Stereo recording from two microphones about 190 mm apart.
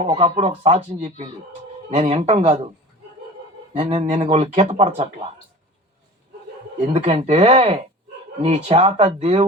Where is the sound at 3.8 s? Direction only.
30° right (ahead or behind).